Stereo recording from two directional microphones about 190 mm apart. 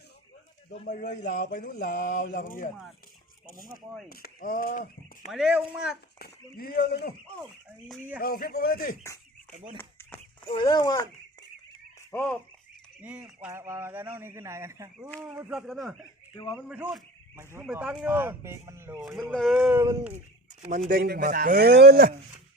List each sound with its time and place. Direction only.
0.9 s speech: 55° left (ahead or behind)
4.1 s chop: 50° left (ahead or behind)
5.3 s speech: 5° right (ahead or behind)
6.1 s speech: 55° left (ahead or behind)
8.2 s speech: 50° left (ahead or behind)
9.7 s chicken: 10° left (ahead or behind)
10.5 s speech: 25° left (ahead or behind)
12.1 s speech: 10° left (ahead or behind)
13.0 s speech: 5° right (ahead or behind)
15.4 s speech: centre (ahead or behind)
19.7 s speech: 15° right (ahead or behind)
20.7 s speech: 45° right (ahead or behind)